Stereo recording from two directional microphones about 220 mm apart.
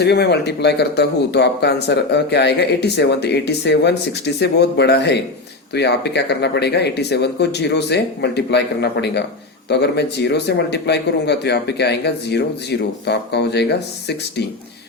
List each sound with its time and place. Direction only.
0.0 s speech: 50° left (ahead or behind)